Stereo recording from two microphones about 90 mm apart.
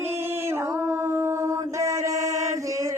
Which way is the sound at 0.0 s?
25° right (ahead or behind).